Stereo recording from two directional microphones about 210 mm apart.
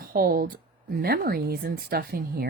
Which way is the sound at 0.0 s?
45° right (ahead or behind).